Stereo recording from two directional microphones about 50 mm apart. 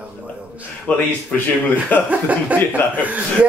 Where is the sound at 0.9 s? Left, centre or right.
Left.